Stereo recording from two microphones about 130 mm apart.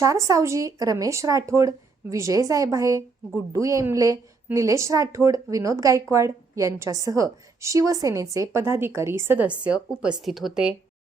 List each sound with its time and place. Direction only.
0.0 s speech: 25° right (ahead or behind); by 10.8 s 5° right (ahead or behind)